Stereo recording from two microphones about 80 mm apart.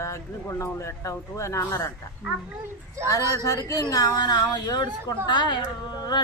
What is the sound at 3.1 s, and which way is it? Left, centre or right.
Speech, left.